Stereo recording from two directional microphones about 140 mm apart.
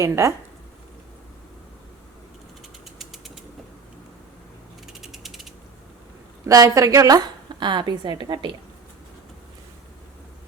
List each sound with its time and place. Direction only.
0.0 s a woman's voice: 20° right (ahead or behind)
3.0 s bird flight: centre (ahead or behind)
4.9 s ratchet: centre (ahead or behind)
6.4 s a woman's voice: 25° right (ahead or behind)